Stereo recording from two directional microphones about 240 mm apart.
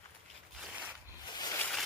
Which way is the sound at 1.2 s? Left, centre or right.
Centre.